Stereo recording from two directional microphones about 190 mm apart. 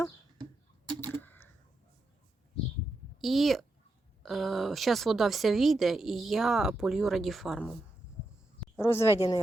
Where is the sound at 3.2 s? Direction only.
Centre (ahead or behind).